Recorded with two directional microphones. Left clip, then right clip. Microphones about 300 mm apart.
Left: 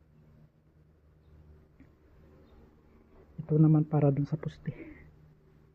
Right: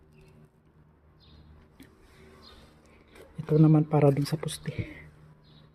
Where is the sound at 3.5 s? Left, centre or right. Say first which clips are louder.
Right 4 dB; centre.